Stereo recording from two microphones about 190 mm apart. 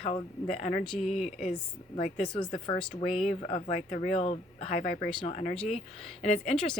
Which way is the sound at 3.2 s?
35° left (ahead or behind).